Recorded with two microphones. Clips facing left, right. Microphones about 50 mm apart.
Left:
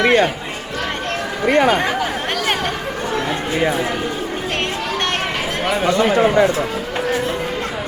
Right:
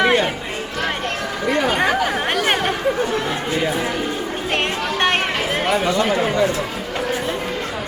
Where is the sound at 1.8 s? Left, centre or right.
Centre.